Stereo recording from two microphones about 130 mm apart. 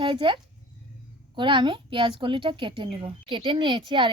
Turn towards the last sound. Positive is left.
turn(degrees=-40)  # may be behind; listen again after turning